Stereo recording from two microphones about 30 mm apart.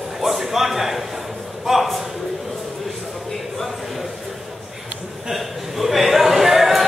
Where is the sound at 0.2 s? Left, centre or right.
Centre.